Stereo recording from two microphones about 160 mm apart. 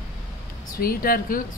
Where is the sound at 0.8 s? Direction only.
65° left (ahead or behind).